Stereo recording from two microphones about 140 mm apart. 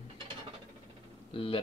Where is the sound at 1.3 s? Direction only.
40° left (ahead or behind).